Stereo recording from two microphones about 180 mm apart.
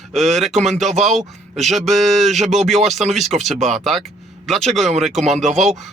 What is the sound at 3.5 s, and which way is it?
Speech, 40° right (ahead or behind).